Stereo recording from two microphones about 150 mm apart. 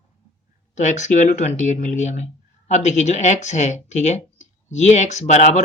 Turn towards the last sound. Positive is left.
turn(degrees=50)  # may be behind; listen again after turning